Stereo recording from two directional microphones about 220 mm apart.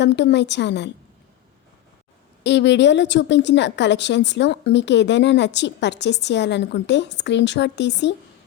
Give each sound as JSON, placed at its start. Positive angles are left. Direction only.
{"t": 0.0, "sound": "a woman's voice", "side_deg": 50}
{"t": 2.4, "sound": "a woman's voice", "side_deg": 50}